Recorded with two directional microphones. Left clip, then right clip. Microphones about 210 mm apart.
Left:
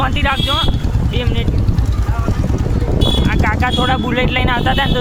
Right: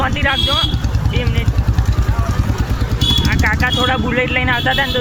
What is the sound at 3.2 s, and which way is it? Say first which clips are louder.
Speech: right 1 dB; 15° left (ahead or behind).